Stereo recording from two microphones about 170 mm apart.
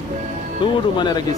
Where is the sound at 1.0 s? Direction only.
25° left (ahead or behind).